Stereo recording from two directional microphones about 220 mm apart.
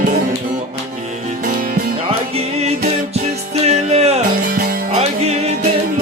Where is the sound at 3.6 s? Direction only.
30° right (ahead or behind).